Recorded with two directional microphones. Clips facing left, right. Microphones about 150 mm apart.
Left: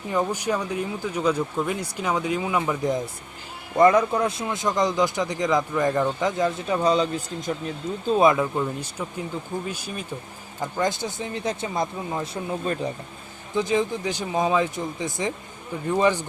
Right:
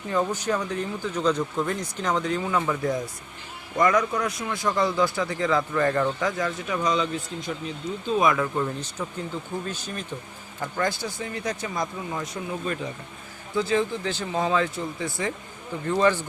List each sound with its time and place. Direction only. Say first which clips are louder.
0.1 s speech: left 1 dB; 10° left (ahead or behind)
3.8 s a man's voice: left 4 dB; 30° left (ahead or behind)
8.5 s a man's voice: left 1 dB; 10° left (ahead or behind); by 12.9 s 35° left (ahead or behind)
13.6 s speech: left 1 dB; 15° left (ahead or behind)